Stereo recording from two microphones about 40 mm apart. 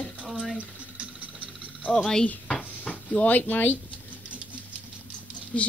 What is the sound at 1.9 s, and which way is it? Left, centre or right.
Speech, centre.